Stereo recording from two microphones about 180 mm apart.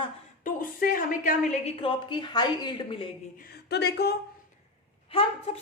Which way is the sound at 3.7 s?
65° left (ahead or behind).